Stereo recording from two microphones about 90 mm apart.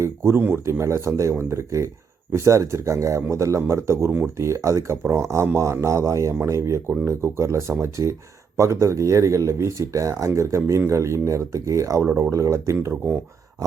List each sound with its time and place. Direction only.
0.0 s speech: 30° right (ahead or behind)
13.6 s speech: 40° right (ahead or behind)